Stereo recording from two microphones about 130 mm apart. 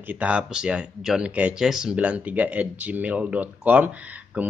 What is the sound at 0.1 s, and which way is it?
Speech, 10° right (ahead or behind).